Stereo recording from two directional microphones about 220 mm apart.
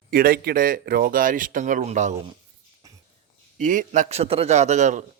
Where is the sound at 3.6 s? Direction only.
35° right (ahead or behind).